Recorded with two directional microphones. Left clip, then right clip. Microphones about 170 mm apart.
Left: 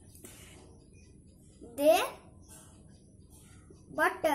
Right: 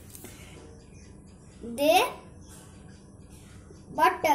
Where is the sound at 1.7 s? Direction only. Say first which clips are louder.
Right 3 dB; 30° left (ahead or behind).